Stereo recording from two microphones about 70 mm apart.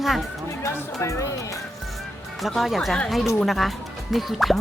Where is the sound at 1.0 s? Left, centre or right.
Left.